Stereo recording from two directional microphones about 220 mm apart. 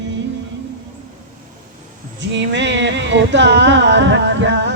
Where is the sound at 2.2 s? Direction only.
55° right (ahead or behind).